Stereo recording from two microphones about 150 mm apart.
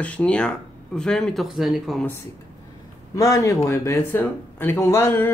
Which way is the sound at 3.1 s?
20° left (ahead or behind).